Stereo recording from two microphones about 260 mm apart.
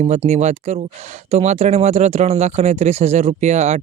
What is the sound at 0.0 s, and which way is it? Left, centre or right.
Speech, right.